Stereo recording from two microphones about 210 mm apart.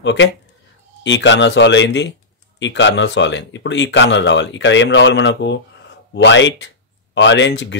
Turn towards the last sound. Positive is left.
turn(degrees=60)  # may be behind; listen again after turning